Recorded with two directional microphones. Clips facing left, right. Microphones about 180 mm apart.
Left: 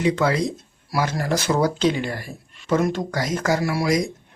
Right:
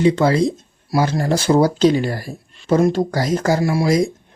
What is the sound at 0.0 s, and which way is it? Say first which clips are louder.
Speech: right 5 dB; 30° right (ahead or behind).